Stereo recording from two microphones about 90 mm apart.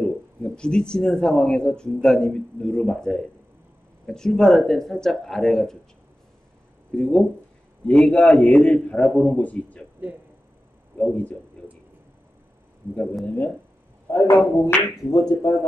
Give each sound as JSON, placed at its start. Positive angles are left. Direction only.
{"t": 0.0, "sound": "speech", "side_deg": 10}
{"t": 7.0, "sound": "speech", "side_deg": 10}
{"t": 11.0, "sound": "speech", "side_deg": 15}
{"t": 14.0, "sound": "a man's voice", "side_deg": 30}
{"t": 15.0, "sound": "speech", "side_deg": 40}